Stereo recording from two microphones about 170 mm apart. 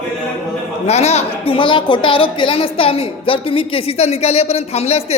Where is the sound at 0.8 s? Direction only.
40° left (ahead or behind).